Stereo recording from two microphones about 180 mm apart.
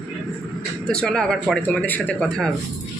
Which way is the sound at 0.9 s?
5° left (ahead or behind).